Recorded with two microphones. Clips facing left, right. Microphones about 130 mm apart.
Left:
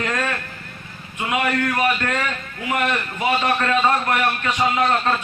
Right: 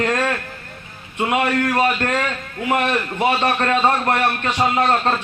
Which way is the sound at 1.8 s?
30° right (ahead or behind).